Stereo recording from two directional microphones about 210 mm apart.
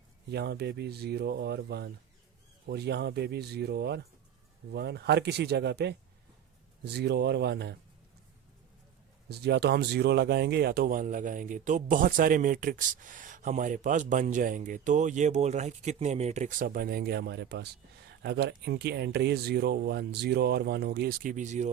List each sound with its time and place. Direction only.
0.3 s speech: 50° right (ahead or behind)
9.3 s speech: 50° right (ahead or behind); by 21.7 s 35° right (ahead or behind)